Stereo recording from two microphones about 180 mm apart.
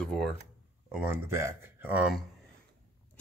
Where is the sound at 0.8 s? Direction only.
10° right (ahead or behind).